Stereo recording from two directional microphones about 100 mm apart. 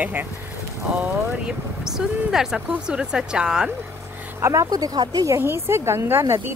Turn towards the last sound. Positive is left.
turn(degrees=-25)  # may be behind; listen again after turning